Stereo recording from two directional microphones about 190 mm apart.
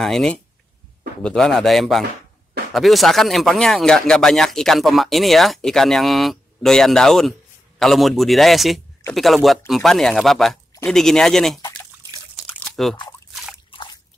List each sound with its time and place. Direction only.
0.0 s speech: 5° left (ahead or behind)
12.4 s crunch: 5° left (ahead or behind)
13.7 s drip: 25° left (ahead or behind)